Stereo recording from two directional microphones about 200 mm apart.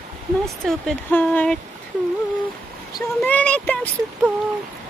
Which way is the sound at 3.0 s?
5° left (ahead or behind).